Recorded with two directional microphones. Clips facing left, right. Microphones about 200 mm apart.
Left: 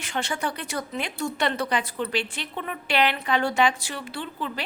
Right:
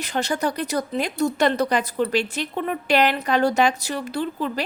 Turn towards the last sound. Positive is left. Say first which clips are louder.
# right 7 dB
turn(degrees=-40)  # may be behind; listen again after turning